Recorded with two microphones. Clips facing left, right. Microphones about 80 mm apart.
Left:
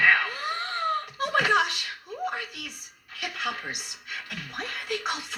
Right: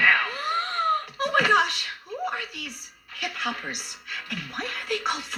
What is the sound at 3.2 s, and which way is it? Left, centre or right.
Speech, right.